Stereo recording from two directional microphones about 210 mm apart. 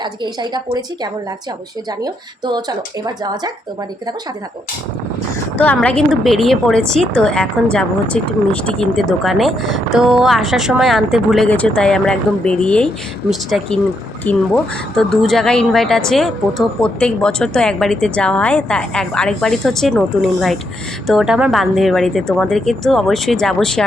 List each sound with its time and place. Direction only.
0.0 s a woman's voice: 20° right (ahead or behind)
5.5 s speech: 5° left (ahead or behind)